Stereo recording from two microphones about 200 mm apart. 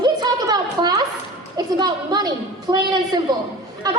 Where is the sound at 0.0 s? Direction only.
20° right (ahead or behind).